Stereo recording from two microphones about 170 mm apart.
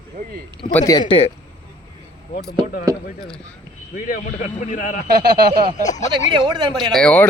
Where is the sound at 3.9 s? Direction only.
45° left (ahead or behind).